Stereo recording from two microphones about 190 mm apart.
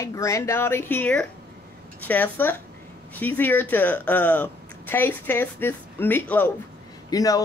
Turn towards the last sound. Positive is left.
turn(degrees=20)  # may be behind; listen again after turning